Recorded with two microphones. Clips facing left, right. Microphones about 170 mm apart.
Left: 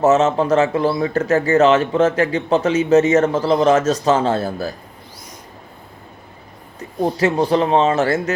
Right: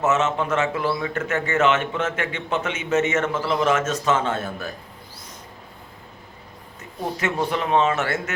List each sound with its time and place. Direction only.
0.0 s speech: 35° left (ahead or behind)
6.7 s speech: 35° left (ahead or behind)